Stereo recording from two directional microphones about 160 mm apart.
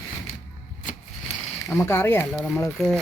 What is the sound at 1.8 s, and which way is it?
Speech, 15° left (ahead or behind).